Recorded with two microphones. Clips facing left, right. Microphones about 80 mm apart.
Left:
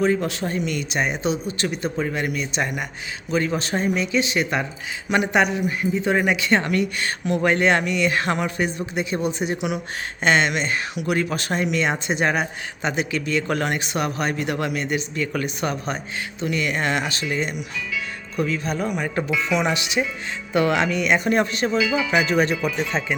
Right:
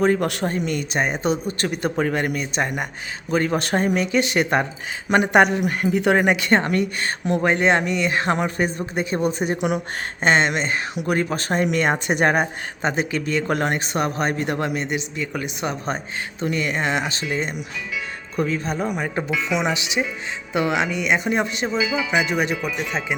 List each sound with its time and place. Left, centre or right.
0.0 s speech: right
0.4 s speech: right
6.6 s speech: right; by 15.8 s centre
16.4 s speech: right; by 23.1 s centre